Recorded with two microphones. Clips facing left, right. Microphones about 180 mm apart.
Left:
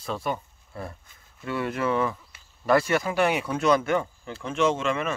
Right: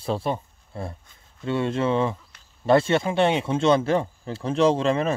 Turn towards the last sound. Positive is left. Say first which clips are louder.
# right 5 dB
turn(degrees=-35)  # may be behind; listen again after turning